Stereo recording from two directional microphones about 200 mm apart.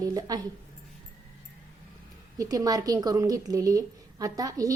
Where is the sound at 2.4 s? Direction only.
20° right (ahead or behind).